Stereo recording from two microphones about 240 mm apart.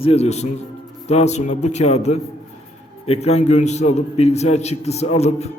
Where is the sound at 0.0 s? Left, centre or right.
Left.